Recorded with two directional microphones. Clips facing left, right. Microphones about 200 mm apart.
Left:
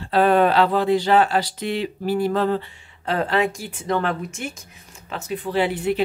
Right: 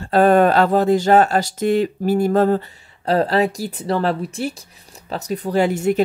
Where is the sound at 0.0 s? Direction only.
45° right (ahead or behind).